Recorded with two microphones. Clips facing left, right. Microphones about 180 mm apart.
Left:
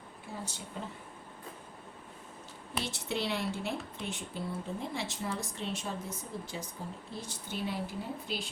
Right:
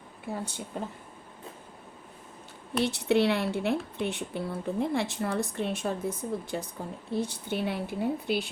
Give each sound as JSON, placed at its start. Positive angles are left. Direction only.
{"t": 0.3, "sound": "speech", "side_deg": -60}
{"t": 2.8, "sound": "speech", "side_deg": -65}